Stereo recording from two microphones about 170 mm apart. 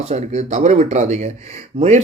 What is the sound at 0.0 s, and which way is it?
Speech, 40° right (ahead or behind).